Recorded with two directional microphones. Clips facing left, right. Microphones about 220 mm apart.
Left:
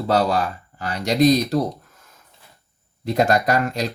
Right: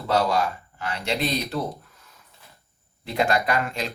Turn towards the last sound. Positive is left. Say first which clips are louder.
# left 5 dB
turn(degrees=40)  # may be behind; listen again after turning